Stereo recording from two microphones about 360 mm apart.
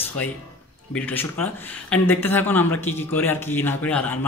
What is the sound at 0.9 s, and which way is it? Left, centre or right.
Speech, centre.